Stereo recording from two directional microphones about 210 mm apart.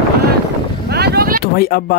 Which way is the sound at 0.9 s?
50° right (ahead or behind).